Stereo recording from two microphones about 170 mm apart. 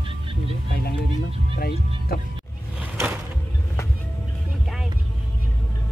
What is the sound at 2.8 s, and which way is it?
Music, 10° right (ahead or behind).